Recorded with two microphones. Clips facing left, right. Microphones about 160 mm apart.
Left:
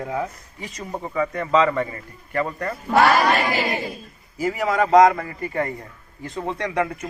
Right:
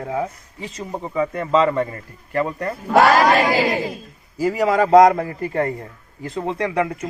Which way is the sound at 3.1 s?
90° right.